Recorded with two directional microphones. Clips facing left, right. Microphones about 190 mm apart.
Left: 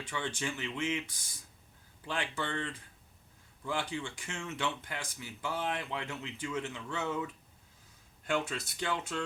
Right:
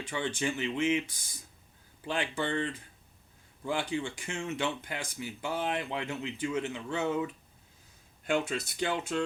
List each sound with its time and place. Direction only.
0.1 s speech: 20° right (ahead or behind)
3.7 s speech: 15° right (ahead or behind)
8.3 s speech: 20° right (ahead or behind)